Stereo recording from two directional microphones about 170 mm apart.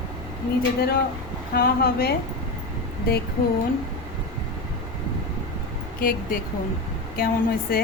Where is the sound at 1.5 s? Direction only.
65° left (ahead or behind).